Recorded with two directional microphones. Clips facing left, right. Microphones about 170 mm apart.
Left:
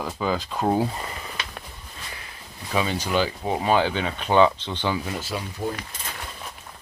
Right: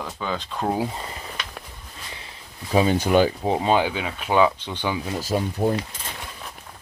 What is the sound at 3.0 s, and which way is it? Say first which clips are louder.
Speech: right 6 dB; 50° right (ahead or behind).